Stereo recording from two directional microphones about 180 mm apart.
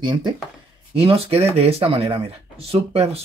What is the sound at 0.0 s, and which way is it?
Speech, 25° right (ahead or behind).